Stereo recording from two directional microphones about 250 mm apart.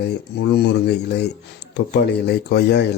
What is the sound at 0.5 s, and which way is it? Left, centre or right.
A man's voice, left.